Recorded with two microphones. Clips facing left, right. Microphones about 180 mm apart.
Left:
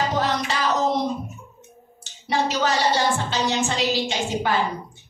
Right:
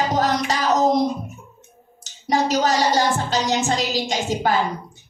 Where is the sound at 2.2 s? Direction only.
40° right (ahead or behind).